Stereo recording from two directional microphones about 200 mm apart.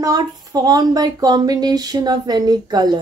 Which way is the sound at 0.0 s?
20° right (ahead or behind).